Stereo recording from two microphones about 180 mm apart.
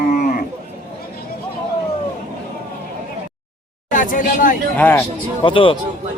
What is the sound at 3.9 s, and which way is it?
Speech, 50° left (ahead or behind).